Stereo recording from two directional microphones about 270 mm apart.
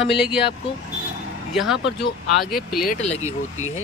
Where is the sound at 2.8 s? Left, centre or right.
Left.